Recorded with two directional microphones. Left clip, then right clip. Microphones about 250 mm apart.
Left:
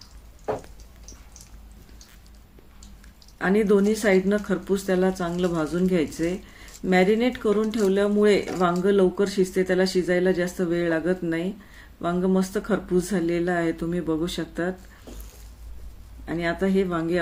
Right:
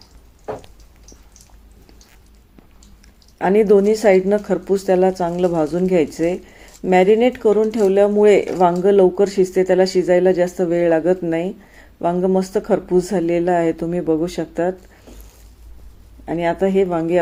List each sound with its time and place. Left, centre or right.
0.0 s a sound: centre
3.3 s speech: centre
16.2 s speech: centre